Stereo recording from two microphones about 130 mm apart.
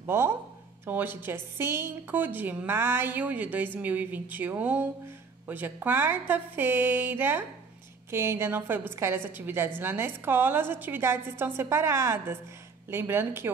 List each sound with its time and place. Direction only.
0.0 s a woman's voice: 15° right (ahead or behind)